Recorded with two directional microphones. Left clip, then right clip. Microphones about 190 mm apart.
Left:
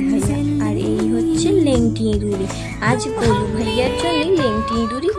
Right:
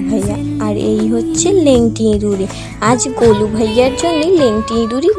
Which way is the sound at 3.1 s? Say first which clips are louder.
Right 7 dB; centre (ahead or behind).